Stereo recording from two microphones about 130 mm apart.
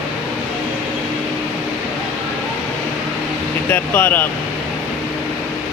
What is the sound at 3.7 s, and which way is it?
Speech, 15° left (ahead or behind).